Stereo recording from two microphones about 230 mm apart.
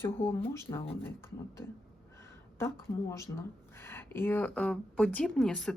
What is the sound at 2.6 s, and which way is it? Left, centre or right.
Speech, centre.